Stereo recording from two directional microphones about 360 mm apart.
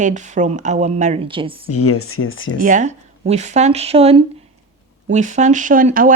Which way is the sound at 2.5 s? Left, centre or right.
Right.